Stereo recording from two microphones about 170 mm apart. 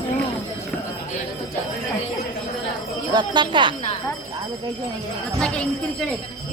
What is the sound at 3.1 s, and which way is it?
Speech, 25° right (ahead or behind).